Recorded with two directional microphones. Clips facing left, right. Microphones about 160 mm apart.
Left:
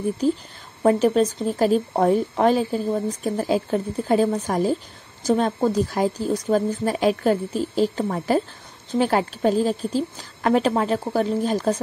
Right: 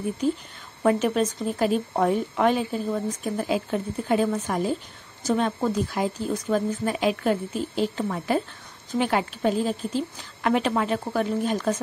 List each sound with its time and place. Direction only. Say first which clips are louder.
0.2 s speech: left 3 dB; 35° left (ahead or behind)